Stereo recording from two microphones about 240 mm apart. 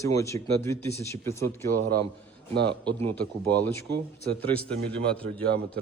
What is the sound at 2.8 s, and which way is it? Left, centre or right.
Speech, right.